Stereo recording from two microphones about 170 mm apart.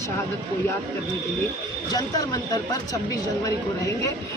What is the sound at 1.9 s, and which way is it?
Speech, 20° left (ahead or behind).